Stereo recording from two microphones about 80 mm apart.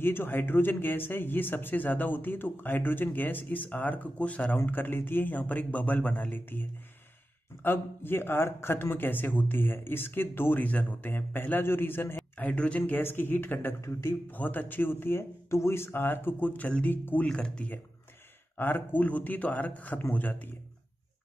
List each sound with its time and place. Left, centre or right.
0.0 s speech: left
12.4 s speech: centre
13.7 s a man's voice: left
14.3 s speech: left
17.3 s speech: centre
18.6 s speech: left